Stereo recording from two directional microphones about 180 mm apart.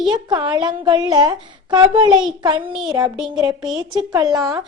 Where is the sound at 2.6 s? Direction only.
5° right (ahead or behind).